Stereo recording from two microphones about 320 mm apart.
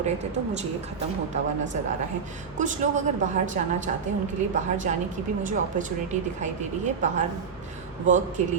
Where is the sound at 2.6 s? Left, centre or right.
Right.